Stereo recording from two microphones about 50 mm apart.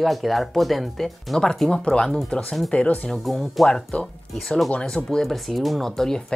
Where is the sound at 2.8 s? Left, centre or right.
Left.